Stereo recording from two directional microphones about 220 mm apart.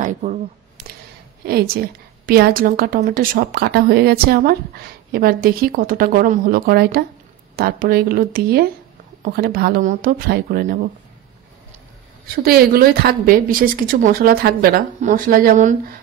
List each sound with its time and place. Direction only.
0.0 s speech: 35° right (ahead or behind)
1.4 s a woman's voice: 45° right (ahead or behind)
12.4 s a woman's voice: 40° right (ahead or behind)